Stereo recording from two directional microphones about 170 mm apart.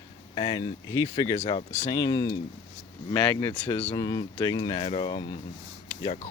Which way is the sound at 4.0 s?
25° left (ahead or behind).